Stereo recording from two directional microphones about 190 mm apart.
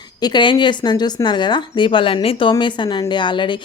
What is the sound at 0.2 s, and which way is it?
Speech, 25° left (ahead or behind).